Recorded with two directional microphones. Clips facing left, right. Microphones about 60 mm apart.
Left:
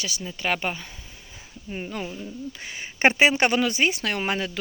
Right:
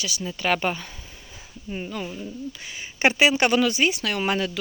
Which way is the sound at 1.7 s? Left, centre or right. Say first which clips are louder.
Right 1 dB; left.